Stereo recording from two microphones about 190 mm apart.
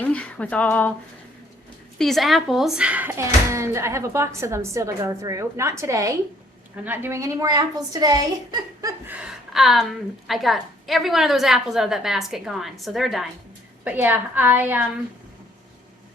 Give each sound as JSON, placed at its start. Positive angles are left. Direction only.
{"t": 0.0, "sound": "speech", "side_deg": 5}
{"t": 2.0, "sound": "a woman's voice", "side_deg": 0}